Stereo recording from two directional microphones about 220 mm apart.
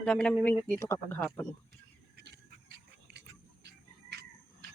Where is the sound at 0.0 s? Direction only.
5° left (ahead or behind).